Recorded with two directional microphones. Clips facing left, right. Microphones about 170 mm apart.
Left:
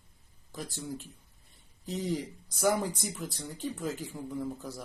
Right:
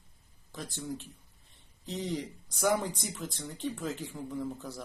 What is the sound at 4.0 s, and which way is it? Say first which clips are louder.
Speech: even; centre (ahead or behind).